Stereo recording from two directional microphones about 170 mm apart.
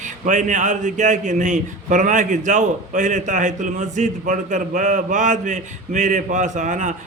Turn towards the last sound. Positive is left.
turn(degrees=-50)  # may be behind; listen again after turning